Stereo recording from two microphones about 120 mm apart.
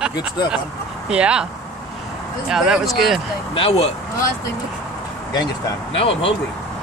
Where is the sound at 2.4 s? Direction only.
5° right (ahead or behind).